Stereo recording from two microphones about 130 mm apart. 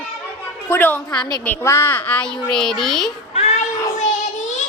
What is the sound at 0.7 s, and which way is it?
A child's voice, 15° left (ahead or behind).